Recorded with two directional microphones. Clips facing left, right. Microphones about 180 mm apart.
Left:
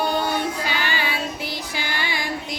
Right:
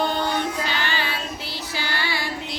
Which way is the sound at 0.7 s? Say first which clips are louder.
Left 1 dB; 15° left (ahead or behind).